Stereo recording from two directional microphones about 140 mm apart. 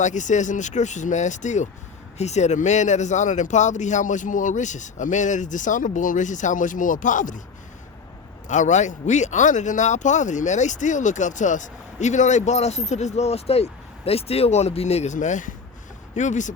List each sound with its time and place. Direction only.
0.0 s speech: 60° left (ahead or behind)
8.4 s speech: 60° left (ahead or behind)